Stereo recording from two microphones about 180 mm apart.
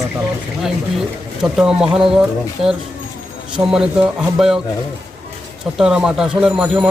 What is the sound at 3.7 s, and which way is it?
Speech, 5° right (ahead or behind).